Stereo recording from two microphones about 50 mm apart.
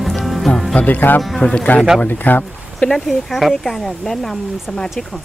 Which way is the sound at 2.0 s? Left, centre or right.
Left.